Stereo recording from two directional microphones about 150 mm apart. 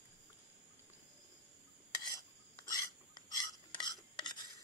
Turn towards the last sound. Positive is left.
turn(degrees=30)  # may be behind; listen again after turning